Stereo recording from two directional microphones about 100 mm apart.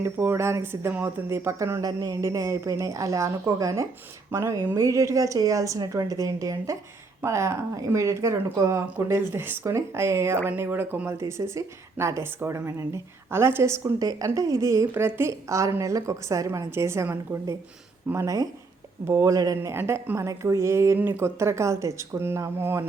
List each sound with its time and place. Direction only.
0.0 s speech: 25° right (ahead or behind)
19.7 s speech: 20° right (ahead or behind)